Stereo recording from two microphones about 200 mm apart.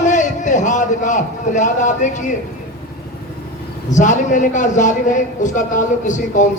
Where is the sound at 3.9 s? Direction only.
40° left (ahead or behind).